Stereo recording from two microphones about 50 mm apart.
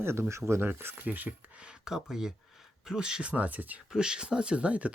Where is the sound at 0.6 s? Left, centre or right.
Right.